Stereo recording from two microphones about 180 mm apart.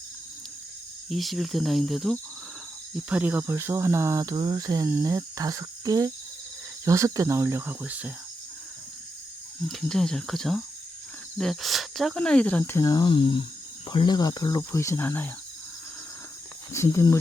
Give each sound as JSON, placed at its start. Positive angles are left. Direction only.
{"t": 1.1, "sound": "speech", "side_deg": 0}
{"t": 9.6, "sound": "speech", "side_deg": 5}
{"t": 16.7, "sound": "speech", "side_deg": 15}